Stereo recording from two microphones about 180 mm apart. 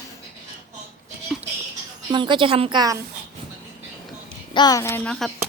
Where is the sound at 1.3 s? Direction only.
Centre (ahead or behind).